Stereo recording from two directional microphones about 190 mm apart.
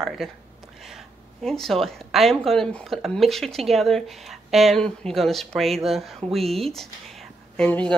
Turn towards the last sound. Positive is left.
turn(degrees=5)  # may be behind; listen again after turning